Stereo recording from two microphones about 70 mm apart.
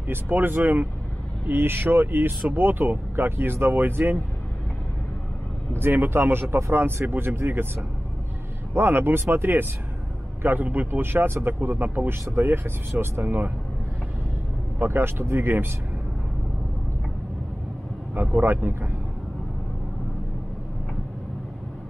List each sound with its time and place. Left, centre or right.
0.1 s speech: right
5.7 s speech: right
8.7 s speech: right
14.8 s speech: right
18.1 s speech: right